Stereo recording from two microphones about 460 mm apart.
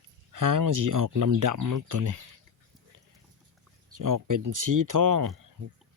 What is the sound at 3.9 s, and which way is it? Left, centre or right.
Speech, right.